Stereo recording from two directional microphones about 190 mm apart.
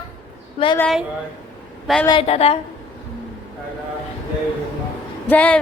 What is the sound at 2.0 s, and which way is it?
Speech, 30° left (ahead or behind).